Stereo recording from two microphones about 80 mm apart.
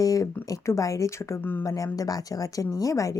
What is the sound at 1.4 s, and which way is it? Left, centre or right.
Speech, left.